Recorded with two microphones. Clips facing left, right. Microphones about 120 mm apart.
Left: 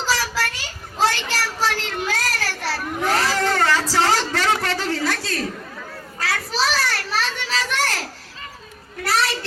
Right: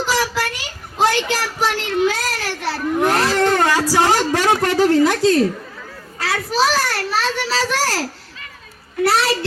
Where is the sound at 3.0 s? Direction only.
60° right (ahead or behind).